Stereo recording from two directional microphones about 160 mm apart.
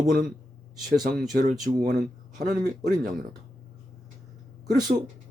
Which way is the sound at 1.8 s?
50° right (ahead or behind).